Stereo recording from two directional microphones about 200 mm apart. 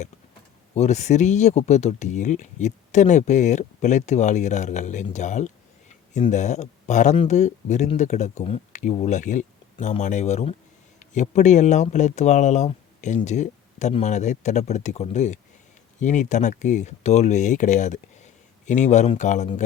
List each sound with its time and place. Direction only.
0.7 s speech: 35° left (ahead or behind)